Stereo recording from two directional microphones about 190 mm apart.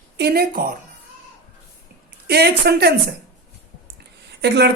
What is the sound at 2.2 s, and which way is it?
Speech, 60° right (ahead or behind).